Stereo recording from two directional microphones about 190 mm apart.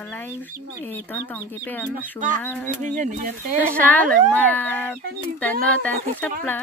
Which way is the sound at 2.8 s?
40° right (ahead or behind).